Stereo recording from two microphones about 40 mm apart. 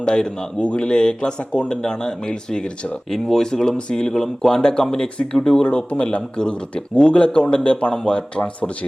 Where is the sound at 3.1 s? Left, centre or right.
Centre; by 8.9 s left.